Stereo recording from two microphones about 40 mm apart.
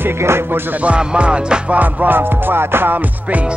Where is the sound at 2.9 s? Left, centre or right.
Right.